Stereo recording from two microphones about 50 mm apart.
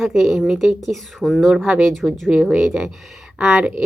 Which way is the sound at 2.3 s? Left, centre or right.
Centre.